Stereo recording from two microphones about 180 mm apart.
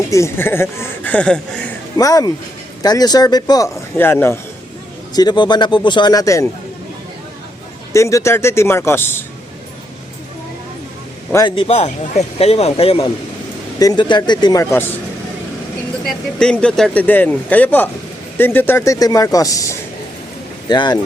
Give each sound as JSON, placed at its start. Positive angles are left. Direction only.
{"t": 0.1, "sound": "speech", "side_deg": 15}
{"t": 2.0, "sound": "a man's voice", "side_deg": 20}
{"t": 5.1, "sound": "a man's voice", "side_deg": 25}
{"t": 7.9, "sound": "speech", "side_deg": 15}
{"t": 11.4, "sound": "a man's voice", "side_deg": 30}
{"t": 16.0, "sound": "a man's voice", "side_deg": 5}